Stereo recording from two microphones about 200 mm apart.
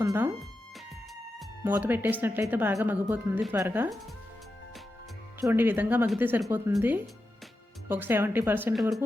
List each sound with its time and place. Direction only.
0.0 s speech: 15° right (ahead or behind)
1.6 s speech: 10° right (ahead or behind)
5.4 s speech: 10° right (ahead or behind)